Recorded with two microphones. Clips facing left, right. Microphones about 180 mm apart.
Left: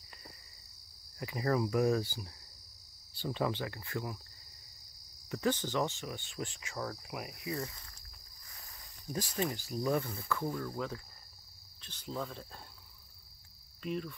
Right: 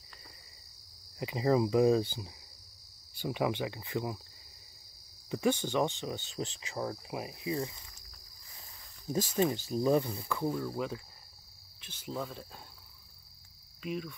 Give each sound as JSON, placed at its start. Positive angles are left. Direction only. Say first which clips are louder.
{"t": 1.1, "sound": "cricket", "louder": "right 4 dB", "side_deg": -15}
{"t": 5.3, "sound": "speech", "louder": "right 3 dB", "side_deg": -10}
{"t": 11.8, "sound": "cricket", "louder": "right 1 dB", "side_deg": -10}
{"t": 13.8, "sound": "cricket", "louder": "even", "side_deg": -5}